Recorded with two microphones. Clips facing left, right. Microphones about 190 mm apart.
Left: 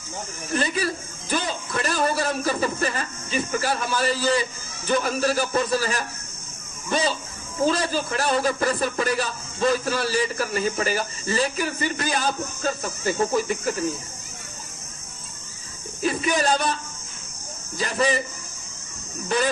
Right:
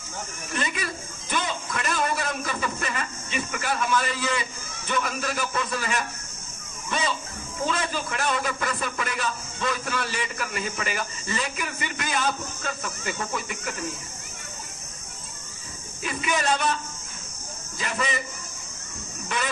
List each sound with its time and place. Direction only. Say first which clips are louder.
0.5 s a man's voice: left 6 dB; 35° left (ahead or behind)
16.0 s speech: left 4 dB; 35° left (ahead or behind)
17.7 s a man's voice: left 6 dB; 35° left (ahead or behind)
19.3 s a man's voice: left 7 dB; 35° left (ahead or behind)